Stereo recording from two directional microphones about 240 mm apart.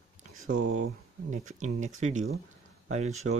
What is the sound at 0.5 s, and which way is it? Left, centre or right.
Speech, right.